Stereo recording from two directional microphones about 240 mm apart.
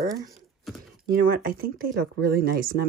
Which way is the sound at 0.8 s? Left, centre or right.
Right.